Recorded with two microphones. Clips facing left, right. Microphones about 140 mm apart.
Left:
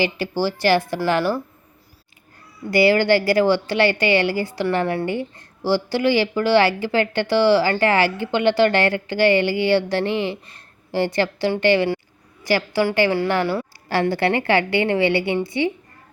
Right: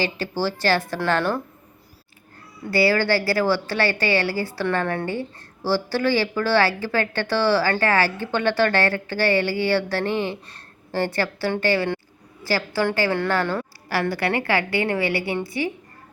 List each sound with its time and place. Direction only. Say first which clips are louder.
0.0 s a woman's voice: left 3 dB; 15° left (ahead or behind)
2.6 s a woman's voice: left 4 dB; 20° left (ahead or behind)
13.8 s a woman's voice: left 4 dB; 25° left (ahead or behind)